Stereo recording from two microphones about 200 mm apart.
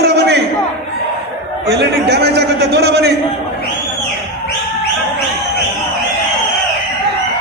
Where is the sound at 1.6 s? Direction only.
55° right (ahead or behind).